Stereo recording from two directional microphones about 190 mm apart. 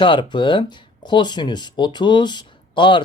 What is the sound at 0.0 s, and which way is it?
Speech, 25° left (ahead or behind).